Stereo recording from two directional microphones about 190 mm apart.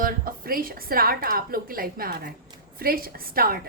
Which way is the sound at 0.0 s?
50° right (ahead or behind).